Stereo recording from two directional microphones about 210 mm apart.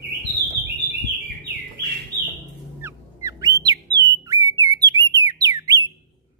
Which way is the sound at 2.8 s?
15° right (ahead or behind).